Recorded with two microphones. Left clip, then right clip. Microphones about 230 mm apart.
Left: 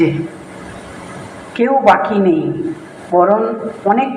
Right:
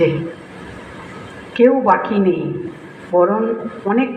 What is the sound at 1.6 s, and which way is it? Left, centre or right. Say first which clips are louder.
Speech: left 2 dB; left.